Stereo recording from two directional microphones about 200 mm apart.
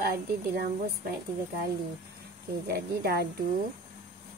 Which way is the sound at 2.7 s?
50° right (ahead or behind).